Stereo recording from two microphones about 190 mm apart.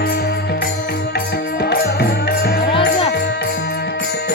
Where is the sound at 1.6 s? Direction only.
55° left (ahead or behind).